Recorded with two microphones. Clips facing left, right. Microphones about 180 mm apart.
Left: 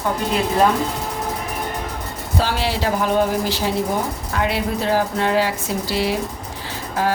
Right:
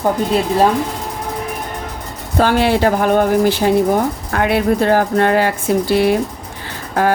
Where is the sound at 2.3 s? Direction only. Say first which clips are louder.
Right 8 dB; 55° right (ahead or behind).